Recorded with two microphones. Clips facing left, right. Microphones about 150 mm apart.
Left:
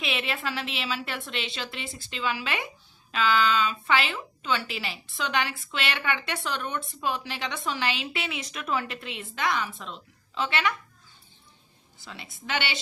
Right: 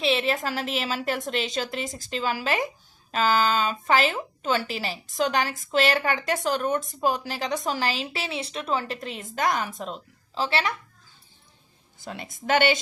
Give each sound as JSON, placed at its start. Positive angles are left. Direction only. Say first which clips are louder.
{"t": 0.0, "sound": "a woman's voice", "louder": "right 7 dB", "side_deg": -35}
{"t": 11.9, "sound": "a woman's voice", "louder": "right 7 dB", "side_deg": -50}